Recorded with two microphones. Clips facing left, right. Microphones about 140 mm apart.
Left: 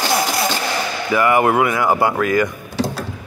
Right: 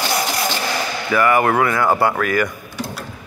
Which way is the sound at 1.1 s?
20° left (ahead or behind).